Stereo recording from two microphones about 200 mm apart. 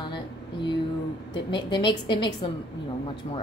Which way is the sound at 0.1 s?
25° left (ahead or behind).